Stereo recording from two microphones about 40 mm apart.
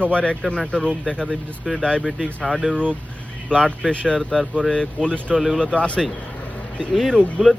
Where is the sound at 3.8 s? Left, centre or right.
Centre.